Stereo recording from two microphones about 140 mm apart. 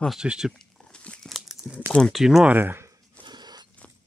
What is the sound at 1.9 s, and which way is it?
Speech, centre (ahead or behind).